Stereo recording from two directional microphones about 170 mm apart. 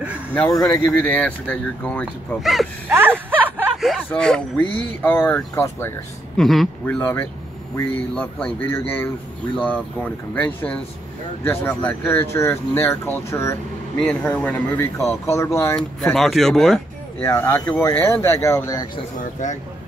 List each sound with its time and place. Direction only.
0.8 s speech: 10° left (ahead or behind)
2.9 s a sound: 10° right (ahead or behind)
4.1 s speech: 5° left (ahead or behind)
6.3 s a man's voice: centre (ahead or behind)
16.0 s speech: centre (ahead or behind); by 18.9 s 20° left (ahead or behind)
19.4 s speech: 45° left (ahead or behind)